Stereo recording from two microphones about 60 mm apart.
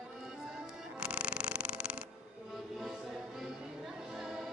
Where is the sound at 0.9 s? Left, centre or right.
Centre.